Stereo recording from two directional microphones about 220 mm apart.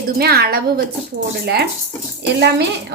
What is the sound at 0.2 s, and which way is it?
Speech, 45° right (ahead or behind).